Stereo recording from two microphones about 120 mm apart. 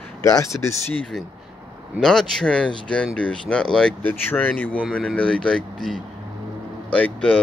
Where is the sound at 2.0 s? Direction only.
5° left (ahead or behind).